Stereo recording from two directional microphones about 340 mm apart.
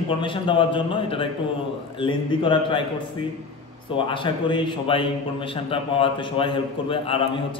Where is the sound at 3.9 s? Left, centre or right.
Centre.